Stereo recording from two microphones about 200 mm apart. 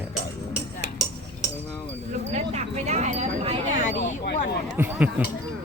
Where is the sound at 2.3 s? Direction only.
35° right (ahead or behind).